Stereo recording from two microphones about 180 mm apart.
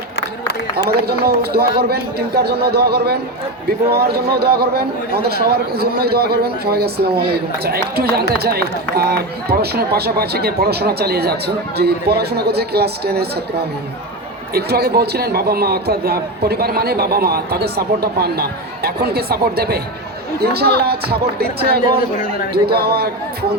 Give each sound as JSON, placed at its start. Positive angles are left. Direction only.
{"t": 0.2, "sound": "a sound", "side_deg": 70}
{"t": 1.0, "sound": "a man's voice", "side_deg": -60}
{"t": 14.5, "sound": "a man's voice", "side_deg": -60}